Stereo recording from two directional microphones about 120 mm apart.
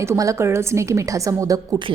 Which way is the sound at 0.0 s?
25° right (ahead or behind).